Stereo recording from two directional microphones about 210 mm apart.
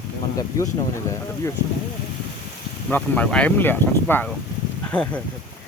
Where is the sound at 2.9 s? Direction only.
10° left (ahead or behind).